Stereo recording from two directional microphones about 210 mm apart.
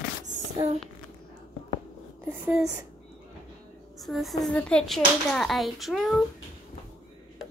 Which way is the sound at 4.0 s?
Centre (ahead or behind).